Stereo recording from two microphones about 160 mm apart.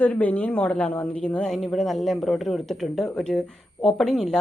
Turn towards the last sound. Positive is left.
turn(degrees=0)  # may be behind; listen again after turning